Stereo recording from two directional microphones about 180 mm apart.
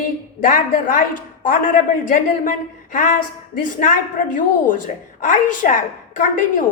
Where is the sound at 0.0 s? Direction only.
45° left (ahead or behind).